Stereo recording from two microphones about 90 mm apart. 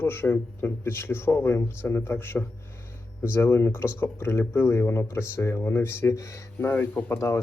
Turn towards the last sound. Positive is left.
turn(degrees=35)  # may be behind; listen again after turning